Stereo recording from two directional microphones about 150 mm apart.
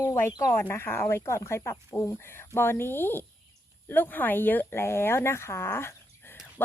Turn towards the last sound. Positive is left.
turn(degrees=15)  # may be behind; listen again after turning